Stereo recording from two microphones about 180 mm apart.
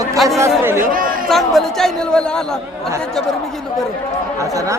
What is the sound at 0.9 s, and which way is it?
Chatter, 50° right (ahead or behind).